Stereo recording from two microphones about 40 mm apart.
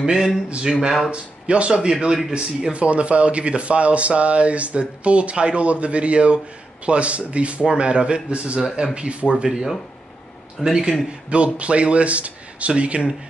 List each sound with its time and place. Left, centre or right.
0.0 s a man's voice: centre
1.1 s speech: right
2.3 s speech: right
10.6 s a man's voice: centre
11.2 s speech: right